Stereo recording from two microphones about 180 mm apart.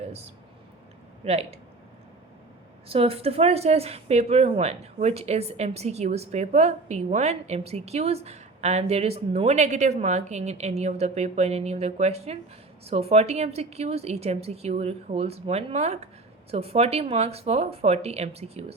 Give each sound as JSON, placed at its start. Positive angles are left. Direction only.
{"t": 1.2, "sound": "speech", "side_deg": -35}
{"t": 2.9, "sound": "speech", "side_deg": -30}